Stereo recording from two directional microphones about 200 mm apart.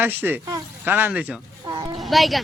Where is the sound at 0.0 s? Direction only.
10° right (ahead or behind).